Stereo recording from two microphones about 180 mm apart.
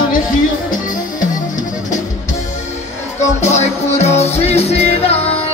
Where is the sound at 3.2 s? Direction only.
40° left (ahead or behind).